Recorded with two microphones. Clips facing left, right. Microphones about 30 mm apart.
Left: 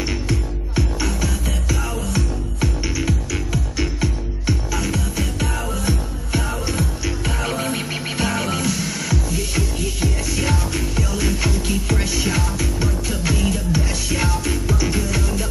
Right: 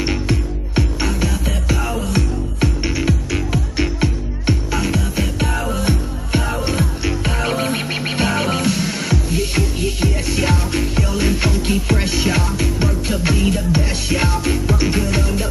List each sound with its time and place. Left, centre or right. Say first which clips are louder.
1.2 s music: right 3 dB; right
4.0 s music: right 3 dB; right